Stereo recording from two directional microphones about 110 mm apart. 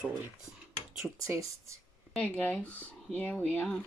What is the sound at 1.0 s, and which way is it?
Speech, 25° right (ahead or behind).